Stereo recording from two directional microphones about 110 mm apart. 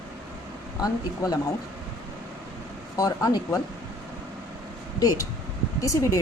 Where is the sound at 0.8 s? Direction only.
35° left (ahead or behind).